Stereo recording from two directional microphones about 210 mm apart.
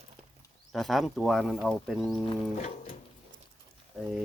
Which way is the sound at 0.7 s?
Centre (ahead or behind).